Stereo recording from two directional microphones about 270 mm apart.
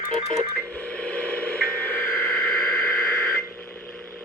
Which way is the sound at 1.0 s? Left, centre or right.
Centre.